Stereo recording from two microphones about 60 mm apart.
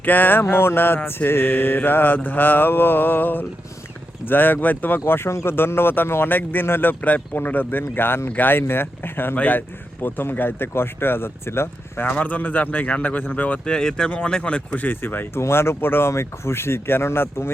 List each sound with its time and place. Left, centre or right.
0.0 s speech: left
0.4 s speech: left
4.9 s speech: left
12.0 s a man's voice: left
13.7 s a man's voice: centre
14.8 s speech: left